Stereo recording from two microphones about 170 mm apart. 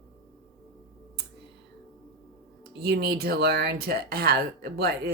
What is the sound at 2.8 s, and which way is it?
Speech, 70° right (ahead or behind).